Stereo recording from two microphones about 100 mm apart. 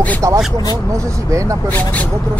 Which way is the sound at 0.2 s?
30° right (ahead or behind).